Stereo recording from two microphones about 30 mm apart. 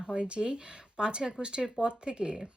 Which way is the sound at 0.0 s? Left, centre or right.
Right.